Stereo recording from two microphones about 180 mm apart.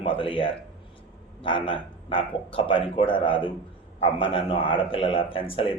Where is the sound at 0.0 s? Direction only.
30° left (ahead or behind).